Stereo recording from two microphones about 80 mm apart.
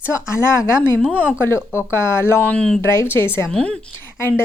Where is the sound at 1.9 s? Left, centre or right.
Left.